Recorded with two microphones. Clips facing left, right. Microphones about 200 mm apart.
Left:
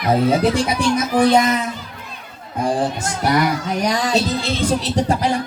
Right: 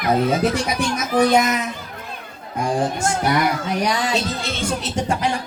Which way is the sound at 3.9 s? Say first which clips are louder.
Left 3 dB; 35° left (ahead or behind).